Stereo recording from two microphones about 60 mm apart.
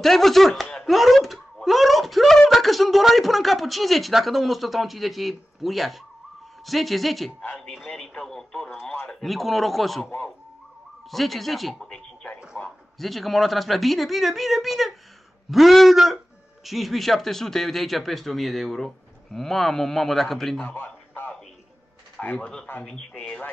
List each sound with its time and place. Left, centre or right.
0.0 s speech: centre
20.7 s a sound: left
22.2 s speech: left
22.8 s speech: centre